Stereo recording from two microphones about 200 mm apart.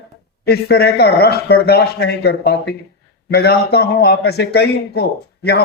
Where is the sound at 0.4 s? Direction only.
55° left (ahead or behind).